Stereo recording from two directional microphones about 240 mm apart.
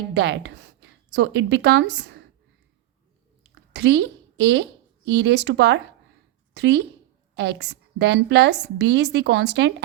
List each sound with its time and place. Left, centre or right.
0.1 s speech: right
3.5 s a woman's voice: right